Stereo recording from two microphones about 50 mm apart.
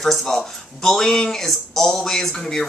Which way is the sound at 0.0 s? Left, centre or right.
Centre.